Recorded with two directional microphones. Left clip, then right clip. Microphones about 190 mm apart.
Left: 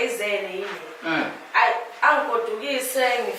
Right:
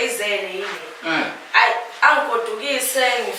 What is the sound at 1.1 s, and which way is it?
Speech, 10° left (ahead or behind).